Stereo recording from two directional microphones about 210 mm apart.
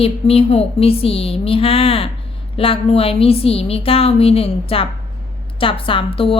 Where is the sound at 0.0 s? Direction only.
30° left (ahead or behind).